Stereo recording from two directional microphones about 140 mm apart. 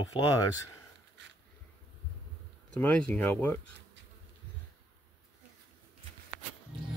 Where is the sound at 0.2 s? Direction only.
35° left (ahead or behind).